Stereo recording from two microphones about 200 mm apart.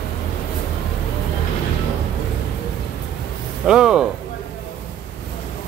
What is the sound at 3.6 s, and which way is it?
Speech, 5° right (ahead or behind).